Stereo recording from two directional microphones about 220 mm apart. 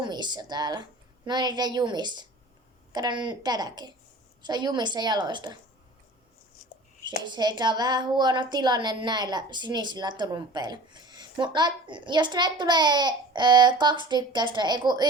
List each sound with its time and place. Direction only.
0.0 s a woman's voice: 20° right (ahead or behind)
7.3 s a woman's voice: 20° right (ahead or behind)